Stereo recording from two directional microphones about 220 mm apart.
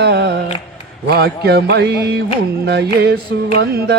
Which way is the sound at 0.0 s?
50° right (ahead or behind).